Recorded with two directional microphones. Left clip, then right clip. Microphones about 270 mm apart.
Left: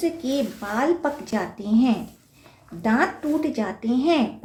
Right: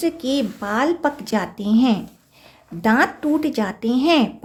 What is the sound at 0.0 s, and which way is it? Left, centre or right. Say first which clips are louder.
A woman's voice: right 3 dB; right.